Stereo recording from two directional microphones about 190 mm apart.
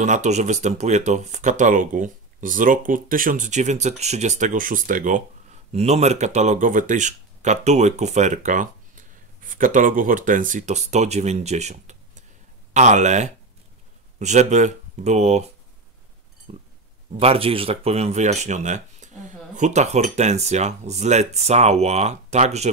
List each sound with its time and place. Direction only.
0.0 s speech: 40° right (ahead or behind)
16.5 s pig: 35° right (ahead or behind)
17.1 s speech: 30° right (ahead or behind)